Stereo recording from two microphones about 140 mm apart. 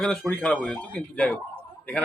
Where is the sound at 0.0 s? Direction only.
5° left (ahead or behind).